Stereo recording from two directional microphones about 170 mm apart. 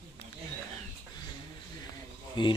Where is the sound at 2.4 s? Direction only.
30° left (ahead or behind).